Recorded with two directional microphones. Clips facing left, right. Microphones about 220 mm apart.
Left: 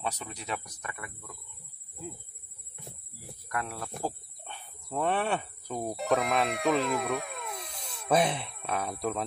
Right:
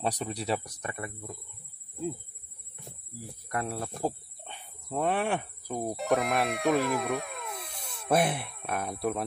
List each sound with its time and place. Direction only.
0.0 s speech: 35° right (ahead or behind)
3.4 s speech: 30° right (ahead or behind)
4.6 s a sound: 10° right (ahead or behind)
5.9 s speech: centre (ahead or behind)